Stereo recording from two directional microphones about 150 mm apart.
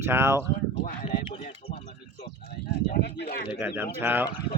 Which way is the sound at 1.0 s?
40° left (ahead or behind).